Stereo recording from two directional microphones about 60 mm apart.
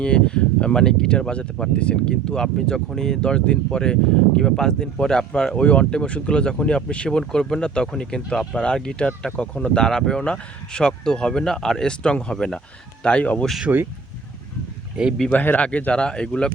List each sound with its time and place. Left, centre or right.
0.0 s speech: centre
13.7 s speech: right
15.3 s speech: left